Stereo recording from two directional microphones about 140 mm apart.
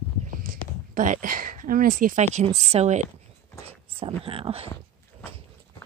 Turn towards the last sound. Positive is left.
turn(degrees=-45)  # may be behind; listen again after turning